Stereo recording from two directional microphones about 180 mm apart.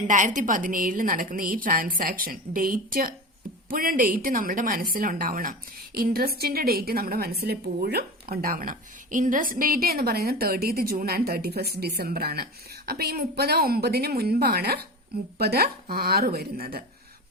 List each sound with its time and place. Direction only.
0.1 s a woman's voice: 45° right (ahead or behind)